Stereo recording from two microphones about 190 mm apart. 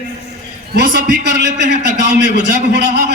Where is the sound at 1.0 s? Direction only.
65° right (ahead or behind).